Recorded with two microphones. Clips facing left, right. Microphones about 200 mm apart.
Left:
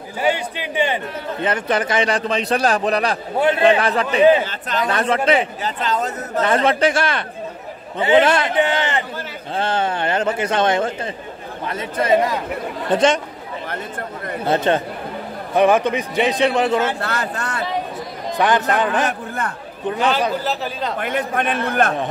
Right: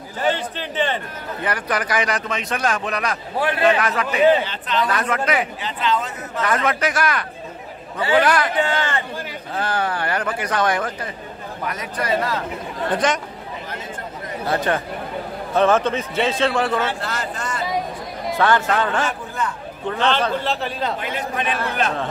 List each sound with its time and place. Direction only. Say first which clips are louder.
0.2 s a man's voice: left 2 dB; 10° left (ahead or behind)
1.4 s a man's voice: left 4 dB; 25° left (ahead or behind)
4.5 s speech: right 1 dB; 45° left (ahead or behind)
4.8 s a man's voice: left 7 dB; 30° left (ahead or behind)
5.6 s speech: left 1 dB; 40° left (ahead or behind)
6.4 s a man's voice: left 4 dB; 30° left (ahead or behind)
14.4 s a man's voice: left 4 dB; 25° left (ahead or behind)
15.5 s a man's voice: left 2 dB; 15° left (ahead or behind)
17.0 s speech: left 3 dB; 60° left (ahead or behind)
18.4 s a man's voice: left 1 dB; 15° left (ahead or behind)
19.0 s a man's voice: left 1 dB; 60° left (ahead or behind)
19.9 s a man's voice: left 1 dB; 10° left (ahead or behind)
21.0 s speech: left 4 dB; 55° left (ahead or behind)